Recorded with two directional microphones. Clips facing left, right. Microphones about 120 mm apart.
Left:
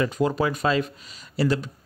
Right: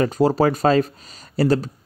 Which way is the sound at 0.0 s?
35° right (ahead or behind).